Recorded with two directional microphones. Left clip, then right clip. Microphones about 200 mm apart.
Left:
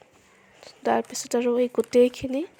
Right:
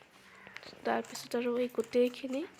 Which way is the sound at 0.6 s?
50° left (ahead or behind).